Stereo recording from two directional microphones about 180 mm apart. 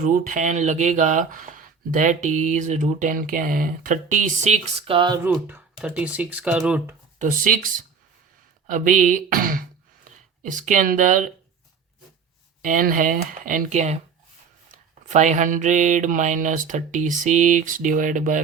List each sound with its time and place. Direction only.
0.0 s speech: 45° right (ahead or behind)
4.9 s speech: 25° right (ahead or behind)
5.2 s speech: 10° right (ahead or behind)
7.2 s speech: 45° right (ahead or behind)
12.6 s speech: 50° right (ahead or behind)
15.0 s speech: 40° right (ahead or behind)